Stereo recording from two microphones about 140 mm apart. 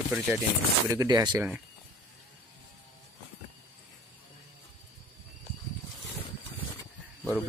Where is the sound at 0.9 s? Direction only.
25° right (ahead or behind).